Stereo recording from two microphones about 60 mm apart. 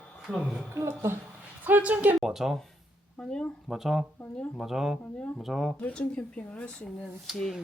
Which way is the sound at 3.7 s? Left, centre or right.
Centre.